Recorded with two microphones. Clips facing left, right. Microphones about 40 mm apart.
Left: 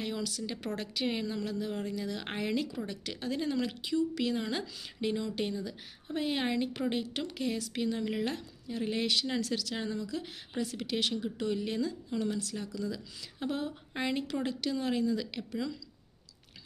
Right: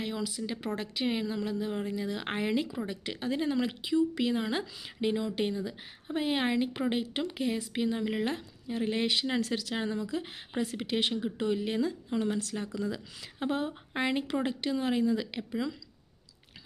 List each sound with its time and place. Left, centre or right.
0.0 s a woman's voice: centre
12.1 s speech: right